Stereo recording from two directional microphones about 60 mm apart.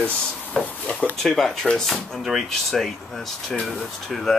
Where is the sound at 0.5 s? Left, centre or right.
Left.